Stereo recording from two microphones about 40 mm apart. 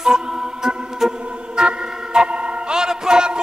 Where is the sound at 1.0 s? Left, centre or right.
Centre.